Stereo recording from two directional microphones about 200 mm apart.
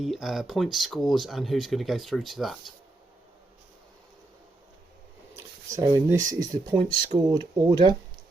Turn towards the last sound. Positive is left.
turn(degrees=-25)  # may be behind; listen again after turning